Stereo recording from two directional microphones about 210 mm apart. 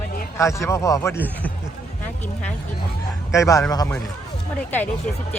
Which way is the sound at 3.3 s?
15° left (ahead or behind).